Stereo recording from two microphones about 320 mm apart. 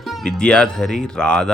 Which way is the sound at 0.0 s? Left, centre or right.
Centre.